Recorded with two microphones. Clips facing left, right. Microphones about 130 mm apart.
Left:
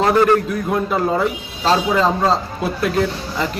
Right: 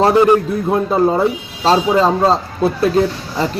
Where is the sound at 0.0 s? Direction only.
20° right (ahead or behind).